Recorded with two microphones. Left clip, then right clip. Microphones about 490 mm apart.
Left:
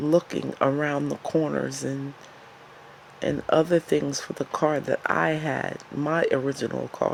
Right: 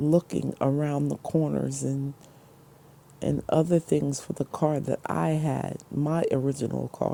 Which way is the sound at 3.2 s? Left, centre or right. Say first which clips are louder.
Left 3 dB; right.